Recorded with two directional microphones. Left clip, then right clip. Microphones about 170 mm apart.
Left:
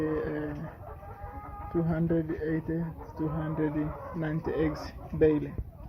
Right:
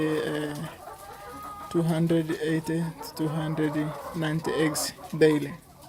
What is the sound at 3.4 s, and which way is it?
Speech, 30° right (ahead or behind).